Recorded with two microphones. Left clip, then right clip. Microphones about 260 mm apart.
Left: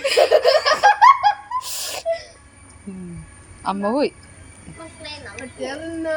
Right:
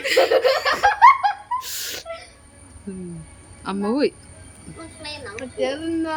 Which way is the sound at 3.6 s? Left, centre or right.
Centre.